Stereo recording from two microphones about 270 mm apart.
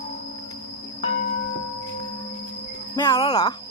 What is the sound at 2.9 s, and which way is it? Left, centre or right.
Speech, centre.